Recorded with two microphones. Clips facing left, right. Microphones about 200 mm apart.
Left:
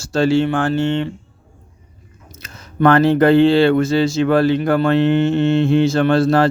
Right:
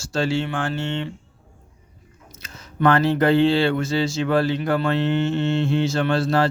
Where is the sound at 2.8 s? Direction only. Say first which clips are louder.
Left 6 dB; 60° left (ahead or behind).